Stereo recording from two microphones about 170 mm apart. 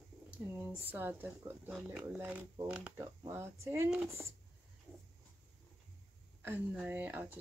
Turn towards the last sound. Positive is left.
turn(degrees=-10)  # may be behind; listen again after turning